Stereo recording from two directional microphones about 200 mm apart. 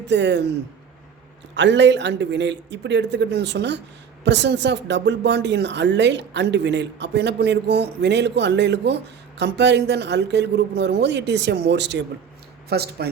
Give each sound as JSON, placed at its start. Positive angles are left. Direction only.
{"t": 0.1, "sound": "speech", "side_deg": -60}
{"t": 1.5, "sound": "speech", "side_deg": -60}